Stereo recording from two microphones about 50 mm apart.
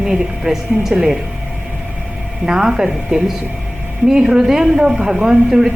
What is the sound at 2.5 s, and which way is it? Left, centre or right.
A woman's voice, centre.